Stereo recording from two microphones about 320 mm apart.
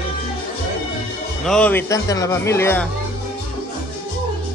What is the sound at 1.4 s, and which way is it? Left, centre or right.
Speech, centre.